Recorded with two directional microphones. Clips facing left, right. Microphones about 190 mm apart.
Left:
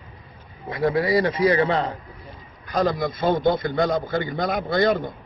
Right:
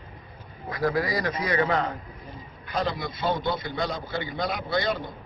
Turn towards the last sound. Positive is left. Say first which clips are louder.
# left 7 dB
turn(degrees=50)  # may be behind; listen again after turning